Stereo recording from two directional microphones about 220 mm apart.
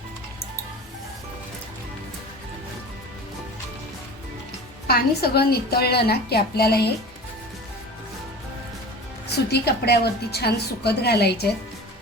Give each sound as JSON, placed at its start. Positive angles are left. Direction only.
{"t": 4.9, "sound": "a woman's voice", "side_deg": 45}
{"t": 9.3, "sound": "a woman's voice", "side_deg": 45}